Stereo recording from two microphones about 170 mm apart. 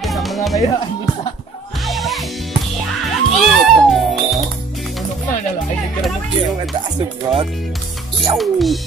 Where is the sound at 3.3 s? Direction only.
Centre (ahead or behind).